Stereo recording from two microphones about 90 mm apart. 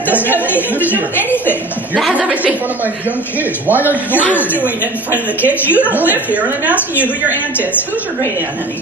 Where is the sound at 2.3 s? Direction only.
15° right (ahead or behind).